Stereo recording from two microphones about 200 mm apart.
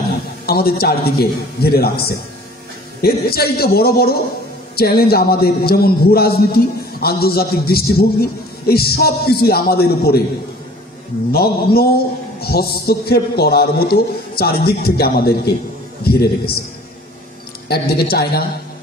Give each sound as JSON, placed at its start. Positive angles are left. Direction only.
{"t": 0.5, "sound": "a man's voice", "side_deg": 50}
{"t": 11.3, "sound": "a man's voice", "side_deg": 50}
{"t": 17.6, "sound": "a man's voice", "side_deg": 50}